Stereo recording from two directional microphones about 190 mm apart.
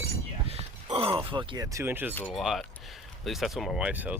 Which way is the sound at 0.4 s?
30° right (ahead or behind).